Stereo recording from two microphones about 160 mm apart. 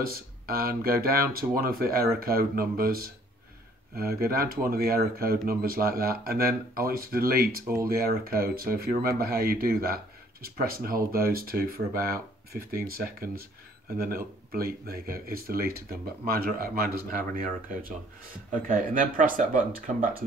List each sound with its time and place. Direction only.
0.0 s speech: 70° right (ahead or behind)
18.5 s speech: 55° right (ahead or behind)